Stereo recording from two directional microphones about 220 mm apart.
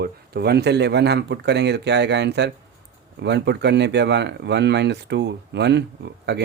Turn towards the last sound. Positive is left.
turn(degrees=-50)  # may be behind; listen again after turning